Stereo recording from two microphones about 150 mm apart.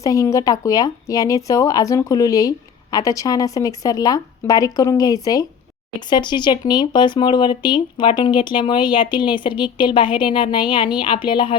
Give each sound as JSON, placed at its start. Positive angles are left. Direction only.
{"t": 0.0, "sound": "speech", "side_deg": 20}